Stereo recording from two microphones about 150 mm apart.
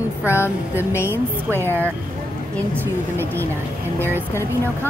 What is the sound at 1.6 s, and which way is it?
Speech, 15° left (ahead or behind).